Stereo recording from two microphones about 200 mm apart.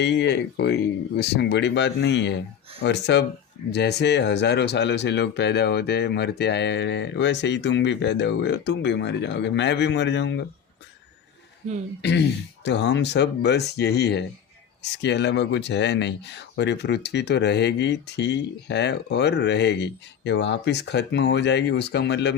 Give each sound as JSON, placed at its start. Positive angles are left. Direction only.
{"t": 0.0, "sound": "speech", "side_deg": 60}
{"t": 12.6, "sound": "speech", "side_deg": 60}